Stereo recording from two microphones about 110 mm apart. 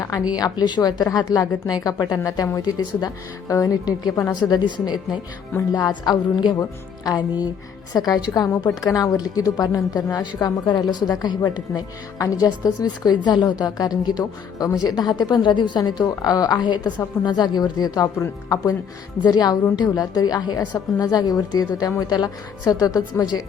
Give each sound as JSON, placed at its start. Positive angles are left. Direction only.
{"t": 0.3, "sound": "a woman's voice", "side_deg": 40}